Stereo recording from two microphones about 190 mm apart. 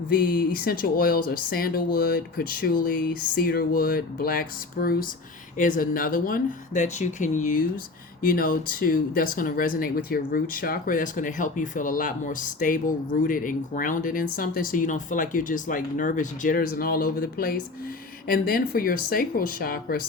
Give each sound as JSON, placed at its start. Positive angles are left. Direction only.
{"t": 0.1, "sound": "speech", "side_deg": 50}